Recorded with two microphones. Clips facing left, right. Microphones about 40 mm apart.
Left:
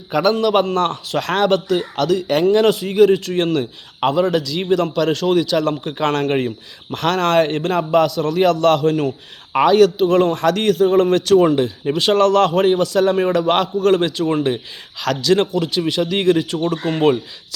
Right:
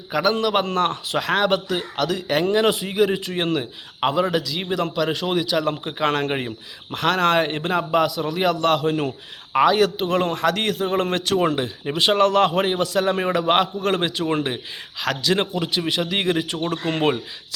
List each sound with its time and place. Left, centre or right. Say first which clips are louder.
0.1 s a man's voice: left 4 dB; centre
0.6 s a man's voice: left 3 dB; right
9.5 s a man's voice: left 2 dB; centre
9.7 s speech: left 7 dB; right
10.3 s a man's voice: left 5 dB; centre
10.8 s speech: left 8 dB; right